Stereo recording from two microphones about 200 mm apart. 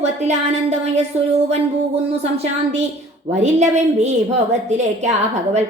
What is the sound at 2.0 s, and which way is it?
A woman's voice, 30° right (ahead or behind).